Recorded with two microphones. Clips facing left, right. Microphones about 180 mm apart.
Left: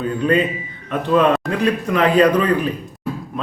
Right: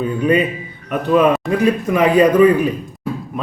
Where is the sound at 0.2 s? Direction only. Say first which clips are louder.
Right 1 dB; 10° right (ahead or behind).